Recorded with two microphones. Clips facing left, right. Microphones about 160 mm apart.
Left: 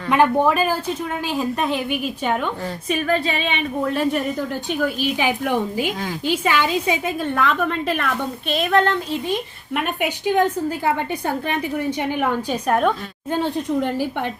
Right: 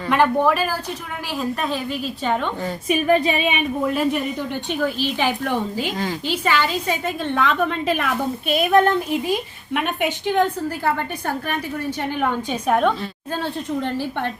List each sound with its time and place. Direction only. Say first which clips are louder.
0.1 s a woman's voice: left 1 dB; 15° left (ahead or behind)
2.8 s a woman's voice: right 4 dB; 15° right (ahead or behind)
4.0 s a woman's voice: left 1 dB; centre (ahead or behind)
9.7 s a woman's voice: right 1 dB; 5° left (ahead or behind)
11.9 s a woman's voice: left 1 dB; 10° left (ahead or behind)
12.5 s a woman's voice: right 1 dB; centre (ahead or behind)
13.3 s a woman's voice: left 4 dB; 15° left (ahead or behind)